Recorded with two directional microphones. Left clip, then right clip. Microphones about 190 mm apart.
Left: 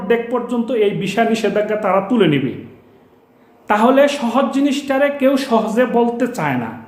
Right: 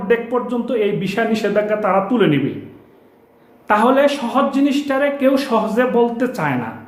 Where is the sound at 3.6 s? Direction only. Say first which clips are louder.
Left 1 dB; 15° left (ahead or behind).